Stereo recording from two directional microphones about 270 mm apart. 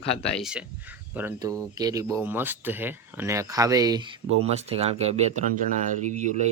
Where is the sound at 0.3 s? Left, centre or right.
Centre.